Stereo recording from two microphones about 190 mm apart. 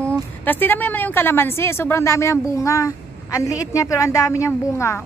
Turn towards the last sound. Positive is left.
turn(degrees=15)  # may be behind; listen again after turning